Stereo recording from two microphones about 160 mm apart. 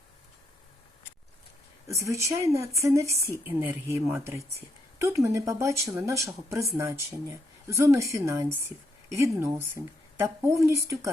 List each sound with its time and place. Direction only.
1.9 s speech: 20° right (ahead or behind)